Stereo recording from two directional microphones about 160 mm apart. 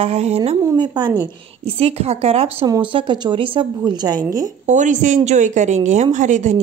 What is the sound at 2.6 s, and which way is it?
A woman's voice, 25° right (ahead or behind).